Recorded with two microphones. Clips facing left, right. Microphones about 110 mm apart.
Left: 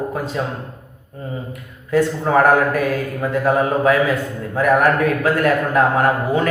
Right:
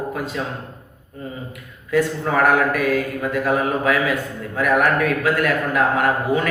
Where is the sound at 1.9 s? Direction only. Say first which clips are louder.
Left 3 dB; 30° left (ahead or behind).